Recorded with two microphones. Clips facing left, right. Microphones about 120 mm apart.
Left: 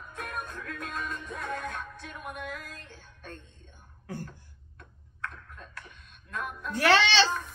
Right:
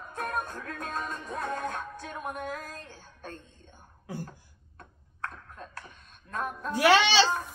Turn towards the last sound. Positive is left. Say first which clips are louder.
# right 2 dB
turn(degrees=-10)  # may be behind; listen again after turning